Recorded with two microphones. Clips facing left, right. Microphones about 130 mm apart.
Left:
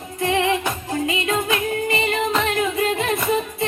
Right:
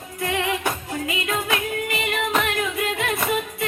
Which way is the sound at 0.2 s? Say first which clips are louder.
Left 4 dB; 30° left (ahead or behind).